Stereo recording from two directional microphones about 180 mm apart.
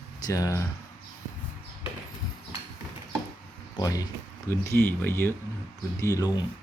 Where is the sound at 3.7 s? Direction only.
20° left (ahead or behind).